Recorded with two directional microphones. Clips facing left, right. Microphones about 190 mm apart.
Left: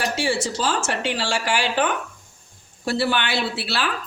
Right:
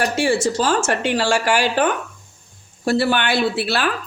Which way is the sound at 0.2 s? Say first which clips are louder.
Right 5 dB; 50° right (ahead or behind).